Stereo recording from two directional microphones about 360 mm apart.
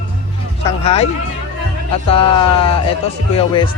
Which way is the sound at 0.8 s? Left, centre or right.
Centre.